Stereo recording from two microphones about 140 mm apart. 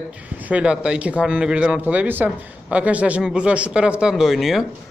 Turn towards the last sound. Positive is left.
turn(degrees=0)  # may be behind; listen again after turning